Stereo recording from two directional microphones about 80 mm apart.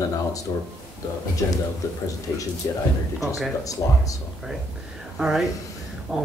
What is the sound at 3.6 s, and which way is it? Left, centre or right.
Speech, left.